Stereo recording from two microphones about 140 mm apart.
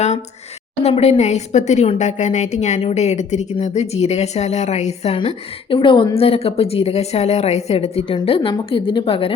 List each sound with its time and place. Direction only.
0.8 s a woman's voice: 50° left (ahead or behind)